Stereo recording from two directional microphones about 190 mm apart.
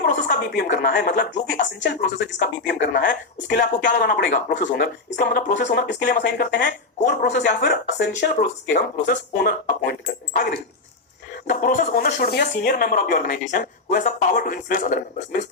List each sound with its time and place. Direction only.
0.0 s speech: 50° left (ahead or behind)
5.9 s speech: 60° left (ahead or behind)
7.0 s speech: 40° left (ahead or behind)
7.3 s speech: 60° left (ahead or behind); by 12.1 s 40° left (ahead or behind)
12.1 s speech: 55° left (ahead or behind)